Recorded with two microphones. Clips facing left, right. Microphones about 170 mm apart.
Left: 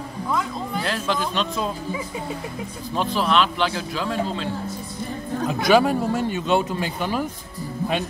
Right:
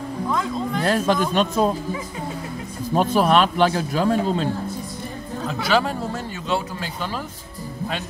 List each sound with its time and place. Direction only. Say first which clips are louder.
0.8 s speech: right 7 dB; 50° right (ahead or behind)
2.9 s speech: right 5 dB; 45° right (ahead or behind)
5.5 s speech: left 4 dB; 15° left (ahead or behind)